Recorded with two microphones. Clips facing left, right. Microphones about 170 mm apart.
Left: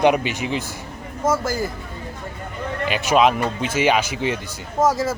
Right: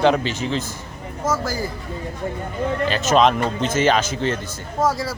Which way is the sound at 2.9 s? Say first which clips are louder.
Left 1 dB; 15° left (ahead or behind).